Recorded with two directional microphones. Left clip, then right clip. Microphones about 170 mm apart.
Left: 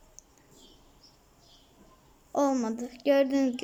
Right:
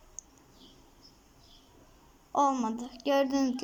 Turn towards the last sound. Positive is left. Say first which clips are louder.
# left 3 dB
turn(degrees=20)  # may be behind; listen again after turning